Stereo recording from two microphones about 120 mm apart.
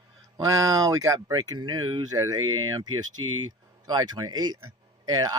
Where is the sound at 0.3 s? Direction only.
30° right (ahead or behind).